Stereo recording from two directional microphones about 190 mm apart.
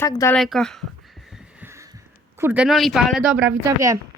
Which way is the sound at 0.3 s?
Centre (ahead or behind).